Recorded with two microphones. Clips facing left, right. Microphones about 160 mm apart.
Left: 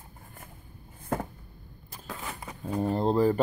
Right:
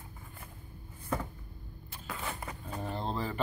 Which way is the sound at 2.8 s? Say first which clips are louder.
Left 12 dB; 40° left (ahead or behind).